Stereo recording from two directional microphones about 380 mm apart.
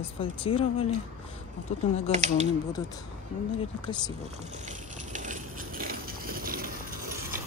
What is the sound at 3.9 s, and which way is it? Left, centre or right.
Speech, centre.